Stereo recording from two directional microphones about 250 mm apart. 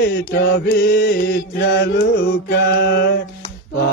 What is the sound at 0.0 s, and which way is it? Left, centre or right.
Mantra, left.